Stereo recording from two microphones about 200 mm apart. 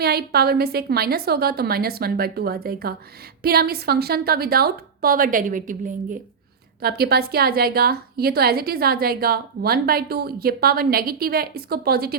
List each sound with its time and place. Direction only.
0.0 s a woman's voice: 50° right (ahead or behind)